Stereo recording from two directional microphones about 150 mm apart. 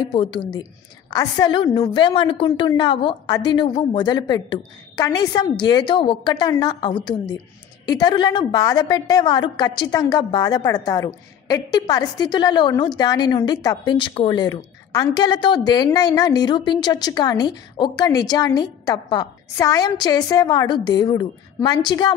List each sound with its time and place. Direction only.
0.1 s a woman's voice: 35° left (ahead or behind)